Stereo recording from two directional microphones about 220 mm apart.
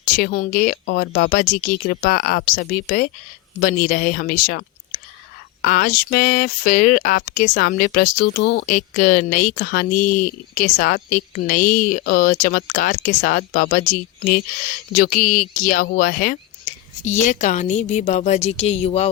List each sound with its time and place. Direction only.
0.2 s speech: 40° left (ahead or behind)
0.9 s speech: 50° left (ahead or behind)
16.7 s whispering: 35° left (ahead or behind)
17.0 s speech: 35° left (ahead or behind)